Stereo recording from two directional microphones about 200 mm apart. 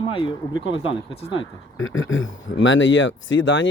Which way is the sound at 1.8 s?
75° left (ahead or behind).